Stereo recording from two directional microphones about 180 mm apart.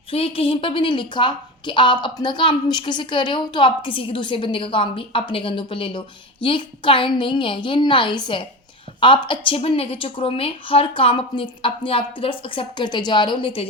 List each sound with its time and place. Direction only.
0.1 s a woman's voice: 30° left (ahead or behind)